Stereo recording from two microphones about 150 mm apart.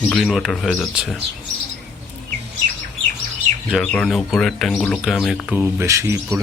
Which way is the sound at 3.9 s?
Centre (ahead or behind).